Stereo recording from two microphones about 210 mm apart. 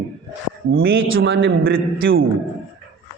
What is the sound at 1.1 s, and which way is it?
A man's voice, 60° right (ahead or behind).